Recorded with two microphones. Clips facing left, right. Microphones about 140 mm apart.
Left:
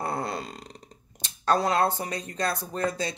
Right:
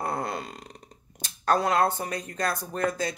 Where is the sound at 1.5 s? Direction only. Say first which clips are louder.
Even; 30° left (ahead or behind).